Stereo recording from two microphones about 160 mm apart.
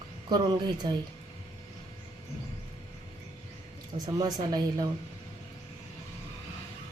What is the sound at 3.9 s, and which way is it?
Speech, 25° right (ahead or behind).